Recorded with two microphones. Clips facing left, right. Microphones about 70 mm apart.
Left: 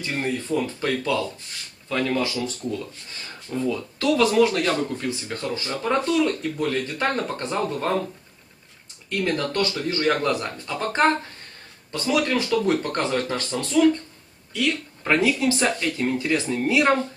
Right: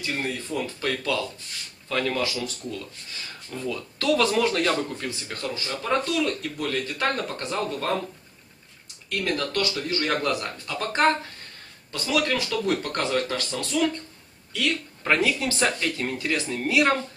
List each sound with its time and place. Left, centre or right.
0.0 s speech: left
1.9 s speech: centre
2.2 s speech: left; by 5.1 s centre
5.3 s speech: centre
9.2 s speech: left
15.1 s speech: centre